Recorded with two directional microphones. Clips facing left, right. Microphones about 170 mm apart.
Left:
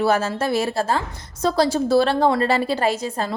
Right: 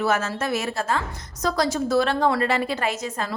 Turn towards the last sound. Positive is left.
turn(degrees=30)  # may be behind; listen again after turning